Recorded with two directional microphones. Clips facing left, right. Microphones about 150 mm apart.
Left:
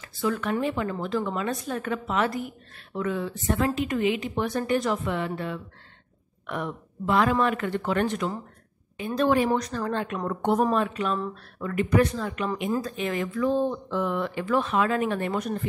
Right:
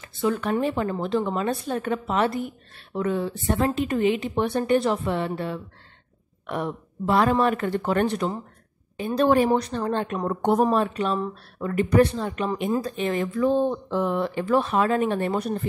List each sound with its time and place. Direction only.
0.0 s speech: 25° right (ahead or behind)
9.5 s speech: 25° right (ahead or behind)